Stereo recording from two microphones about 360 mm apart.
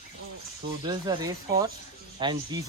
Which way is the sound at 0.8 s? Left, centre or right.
Centre.